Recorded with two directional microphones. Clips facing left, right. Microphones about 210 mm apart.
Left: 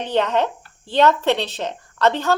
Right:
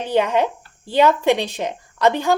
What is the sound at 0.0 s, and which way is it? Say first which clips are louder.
Speech: right 1 dB; 10° right (ahead or behind).